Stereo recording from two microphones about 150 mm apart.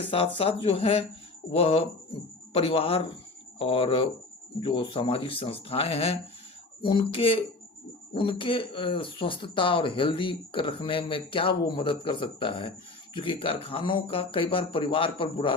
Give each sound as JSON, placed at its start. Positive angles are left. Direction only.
{"t": 0.1, "sound": "speech", "side_deg": 40}